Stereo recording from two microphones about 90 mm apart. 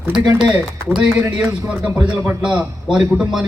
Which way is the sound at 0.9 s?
10° right (ahead or behind).